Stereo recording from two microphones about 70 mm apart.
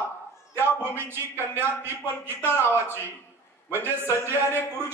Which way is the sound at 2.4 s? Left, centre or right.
Left.